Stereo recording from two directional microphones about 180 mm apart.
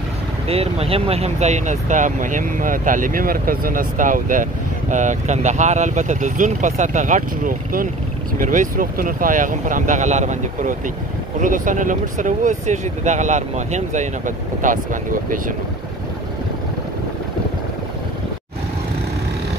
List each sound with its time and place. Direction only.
0.5 s speech: 35° right (ahead or behind)